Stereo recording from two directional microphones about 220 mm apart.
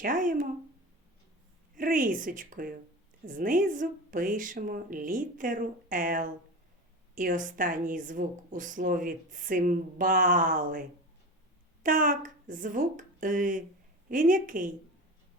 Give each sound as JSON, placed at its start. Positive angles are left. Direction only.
{"t": 0.0, "sound": "a woman's voice", "side_deg": -35}
{"t": 1.7, "sound": "a woman's voice", "side_deg": -40}